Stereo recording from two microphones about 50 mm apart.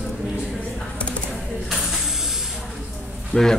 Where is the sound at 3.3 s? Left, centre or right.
Left.